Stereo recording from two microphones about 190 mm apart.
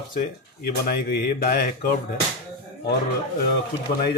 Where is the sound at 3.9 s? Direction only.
30° left (ahead or behind).